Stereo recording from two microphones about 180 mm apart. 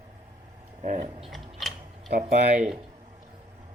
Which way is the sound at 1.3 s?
Centre (ahead or behind).